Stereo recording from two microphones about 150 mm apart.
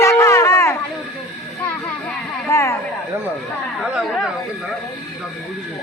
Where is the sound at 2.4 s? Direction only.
20° left (ahead or behind).